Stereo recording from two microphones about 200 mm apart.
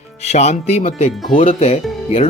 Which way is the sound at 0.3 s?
35° left (ahead or behind).